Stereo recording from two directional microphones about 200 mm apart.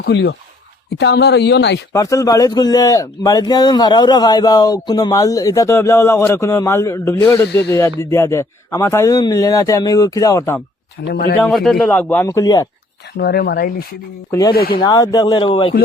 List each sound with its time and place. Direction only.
0.0 s speech: 60° left (ahead or behind)
1.9 s a man's voice: 15° left (ahead or behind)
11.0 s speech: 55° left (ahead or behind)
11.3 s a man's voice: 5° left (ahead or behind)
13.1 s speech: 50° left (ahead or behind)
14.3 s a man's voice: 15° left (ahead or behind)
14.5 s speech: 50° left (ahead or behind)
14.8 s a man's voice: 20° left (ahead or behind)